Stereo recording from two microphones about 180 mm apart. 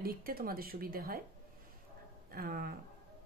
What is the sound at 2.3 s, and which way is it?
Speech, 55° right (ahead or behind).